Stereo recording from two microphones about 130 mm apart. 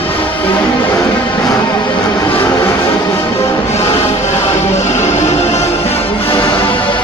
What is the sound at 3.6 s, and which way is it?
Music, 50° left (ahead or behind).